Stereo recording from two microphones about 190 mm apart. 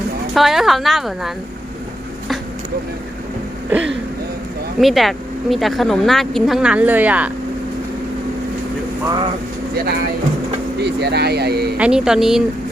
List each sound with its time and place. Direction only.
0.3 s speech: centre (ahead or behind)
3.7 s speech: 10° right (ahead or behind)
9.7 s speech: 55° right (ahead or behind)
11.8 s speech: 5° right (ahead or behind)